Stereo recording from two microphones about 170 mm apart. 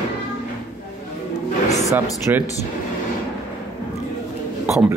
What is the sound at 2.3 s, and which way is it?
Speech, 15° right (ahead or behind).